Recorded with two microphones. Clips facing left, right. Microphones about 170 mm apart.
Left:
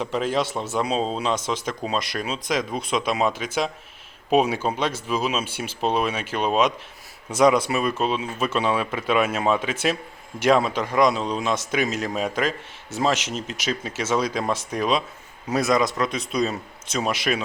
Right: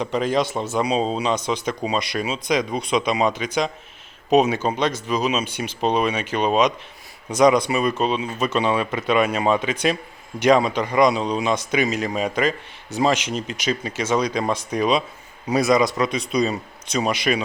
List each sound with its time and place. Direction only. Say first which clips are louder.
0.0 s a man's voice: right 3 dB; centre (ahead or behind)